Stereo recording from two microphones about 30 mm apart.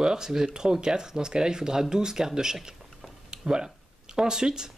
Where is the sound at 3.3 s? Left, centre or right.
Right.